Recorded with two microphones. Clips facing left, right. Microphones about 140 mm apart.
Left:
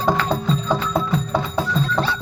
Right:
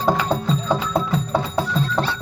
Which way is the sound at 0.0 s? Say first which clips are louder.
Even; 10° right (ahead or behind).